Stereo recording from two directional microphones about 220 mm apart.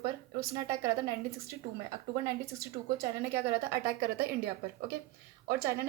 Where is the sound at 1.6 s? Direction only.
40° right (ahead or behind).